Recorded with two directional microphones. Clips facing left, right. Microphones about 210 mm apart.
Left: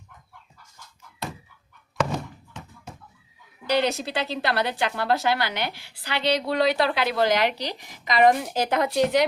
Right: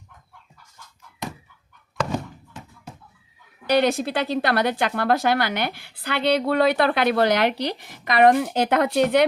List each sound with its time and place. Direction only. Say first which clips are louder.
3.7 s speech: right 4 dB; 55° right (ahead or behind)